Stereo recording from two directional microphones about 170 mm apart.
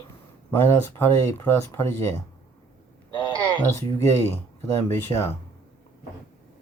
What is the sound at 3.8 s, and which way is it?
Speech, 15° left (ahead or behind).